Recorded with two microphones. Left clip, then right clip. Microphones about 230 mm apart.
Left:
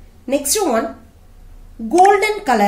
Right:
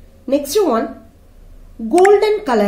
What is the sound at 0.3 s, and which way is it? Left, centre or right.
Speech, centre.